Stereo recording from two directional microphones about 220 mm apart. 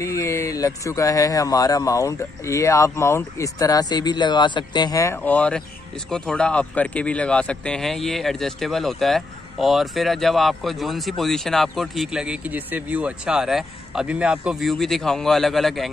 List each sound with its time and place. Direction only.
0.0 s speech: 15° left (ahead or behind)